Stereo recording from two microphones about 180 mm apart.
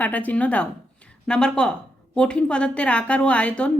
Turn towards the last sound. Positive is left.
turn(degrees=5)  # may be behind; listen again after turning